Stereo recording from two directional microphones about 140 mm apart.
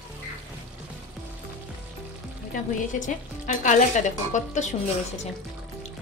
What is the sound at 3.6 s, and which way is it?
A woman's voice, 60° left (ahead or behind).